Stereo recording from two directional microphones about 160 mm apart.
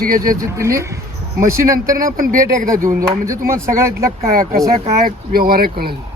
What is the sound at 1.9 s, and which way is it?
Speech, 60° right (ahead or behind).